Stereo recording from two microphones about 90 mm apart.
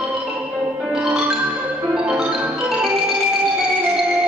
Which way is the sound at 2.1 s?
5° right (ahead or behind).